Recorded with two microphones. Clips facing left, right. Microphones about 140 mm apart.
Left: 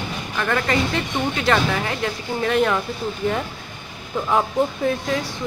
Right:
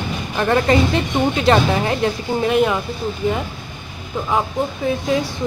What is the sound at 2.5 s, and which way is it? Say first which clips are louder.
Speech: right 1 dB; 10° right (ahead or behind).